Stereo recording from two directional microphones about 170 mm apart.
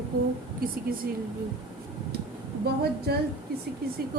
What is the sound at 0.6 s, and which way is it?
Speech, 60° right (ahead or behind).